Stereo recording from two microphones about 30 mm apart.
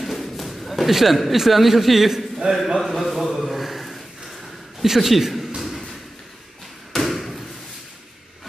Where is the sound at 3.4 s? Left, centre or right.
Centre.